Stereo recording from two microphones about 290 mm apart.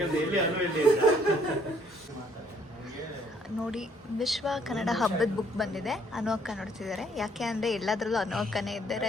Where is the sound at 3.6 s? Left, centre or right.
Centre.